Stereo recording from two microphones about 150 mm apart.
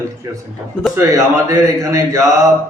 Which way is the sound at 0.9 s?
20° right (ahead or behind).